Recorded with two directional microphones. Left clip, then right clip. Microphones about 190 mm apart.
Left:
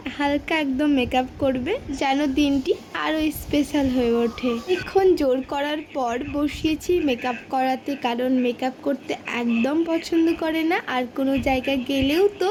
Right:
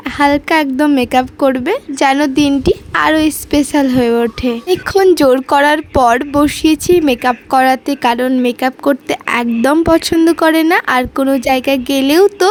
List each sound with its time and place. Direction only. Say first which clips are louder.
0.0 s a woman's voice: right 12 dB; 65° right (ahead or behind)